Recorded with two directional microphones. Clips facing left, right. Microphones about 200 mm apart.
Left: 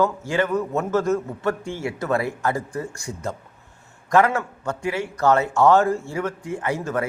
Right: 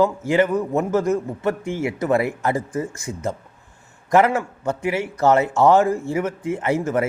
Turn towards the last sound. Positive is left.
turn(degrees=-20)  # may be behind; listen again after turning